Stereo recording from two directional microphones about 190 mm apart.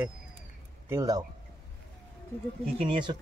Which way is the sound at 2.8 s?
25° right (ahead or behind).